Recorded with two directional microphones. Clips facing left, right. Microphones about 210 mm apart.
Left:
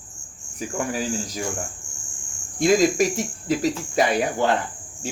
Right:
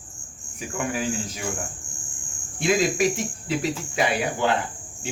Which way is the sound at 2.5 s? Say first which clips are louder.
Left 4 dB; 40° left (ahead or behind).